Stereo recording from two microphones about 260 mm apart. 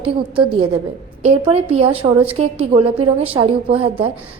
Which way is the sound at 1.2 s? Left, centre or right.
Right.